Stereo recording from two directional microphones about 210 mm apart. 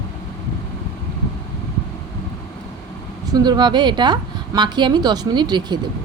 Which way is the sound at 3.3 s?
20° right (ahead or behind).